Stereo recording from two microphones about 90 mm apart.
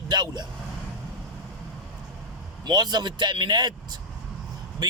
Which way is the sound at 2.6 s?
50° right (ahead or behind).